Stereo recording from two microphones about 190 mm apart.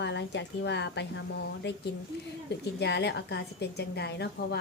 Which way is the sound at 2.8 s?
65° left (ahead or behind).